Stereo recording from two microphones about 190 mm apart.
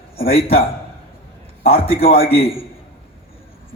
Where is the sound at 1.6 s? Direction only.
30° left (ahead or behind).